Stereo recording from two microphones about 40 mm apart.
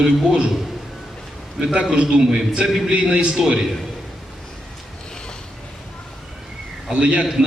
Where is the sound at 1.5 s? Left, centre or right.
Centre.